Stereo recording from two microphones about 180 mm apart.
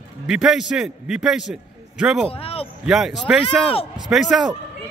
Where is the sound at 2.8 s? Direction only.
Centre (ahead or behind).